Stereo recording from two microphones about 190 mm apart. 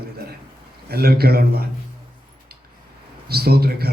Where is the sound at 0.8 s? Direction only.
55° right (ahead or behind).